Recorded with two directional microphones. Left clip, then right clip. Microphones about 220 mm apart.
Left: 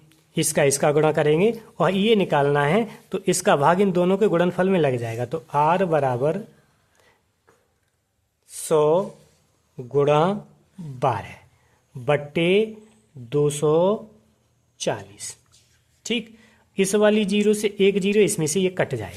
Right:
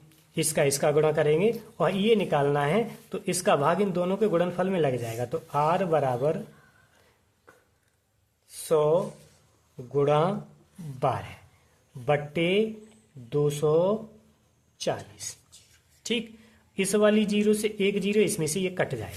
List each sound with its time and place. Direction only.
0.1 s speech: 30° left (ahead or behind)
8.4 s a sound: 30° left (ahead or behind)
9.7 s speech: 30° left (ahead or behind)